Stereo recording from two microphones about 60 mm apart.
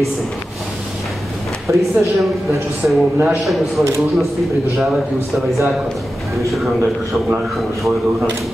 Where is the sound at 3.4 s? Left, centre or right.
Centre.